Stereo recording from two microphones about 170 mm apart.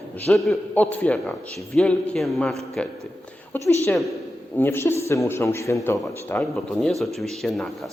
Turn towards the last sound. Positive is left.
turn(degrees=0)  # may be behind; listen again after turning